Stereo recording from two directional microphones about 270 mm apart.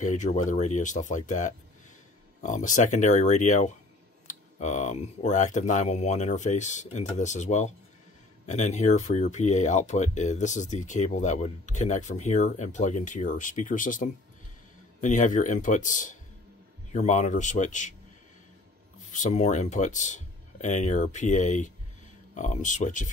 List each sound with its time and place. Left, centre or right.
0.0 s speech: left
19.0 s speech: left